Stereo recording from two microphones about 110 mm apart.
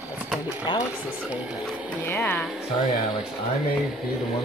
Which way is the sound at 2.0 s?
20° left (ahead or behind).